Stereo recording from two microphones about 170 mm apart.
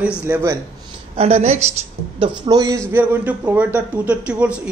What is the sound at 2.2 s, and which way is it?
Speech, 25° right (ahead or behind).